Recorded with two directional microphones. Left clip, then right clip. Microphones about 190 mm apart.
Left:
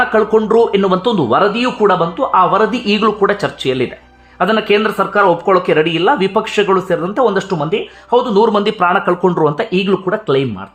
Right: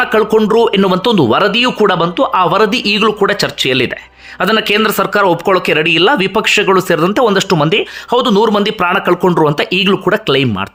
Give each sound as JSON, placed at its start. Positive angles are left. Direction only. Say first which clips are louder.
{"t": 0.0, "sound": "speech", "louder": "right 1 dB", "side_deg": -15}